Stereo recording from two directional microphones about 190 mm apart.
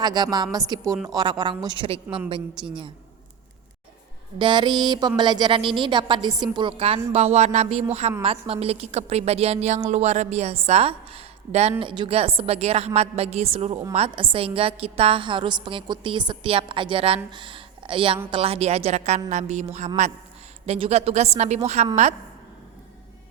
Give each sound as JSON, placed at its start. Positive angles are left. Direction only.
{"t": 0.0, "sound": "a woman's voice", "side_deg": -20}
{"t": 2.0, "sound": "a woman's voice", "side_deg": -5}
{"t": 4.4, "sound": "a woman's voice", "side_deg": -25}
{"t": 17.3, "sound": "a sound", "side_deg": -25}
{"t": 18.3, "sound": "a woman's voice", "side_deg": -30}